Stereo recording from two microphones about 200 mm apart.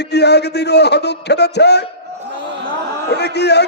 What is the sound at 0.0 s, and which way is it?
A man's voice, 55° left (ahead or behind).